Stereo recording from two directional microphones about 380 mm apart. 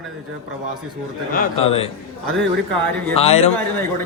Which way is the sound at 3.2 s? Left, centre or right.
Centre.